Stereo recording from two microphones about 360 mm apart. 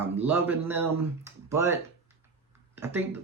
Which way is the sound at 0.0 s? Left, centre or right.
Centre.